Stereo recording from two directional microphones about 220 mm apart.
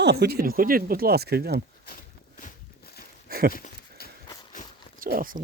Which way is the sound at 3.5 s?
40° left (ahead or behind).